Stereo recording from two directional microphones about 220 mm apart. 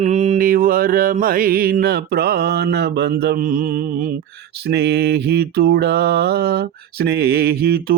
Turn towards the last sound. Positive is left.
turn(degrees=-45)  # may be behind; listen again after turning